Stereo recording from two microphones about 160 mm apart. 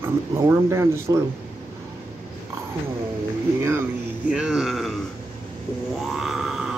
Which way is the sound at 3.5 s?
15° right (ahead or behind).